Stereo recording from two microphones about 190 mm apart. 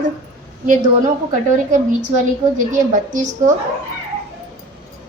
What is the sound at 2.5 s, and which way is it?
Speech, 45° right (ahead or behind).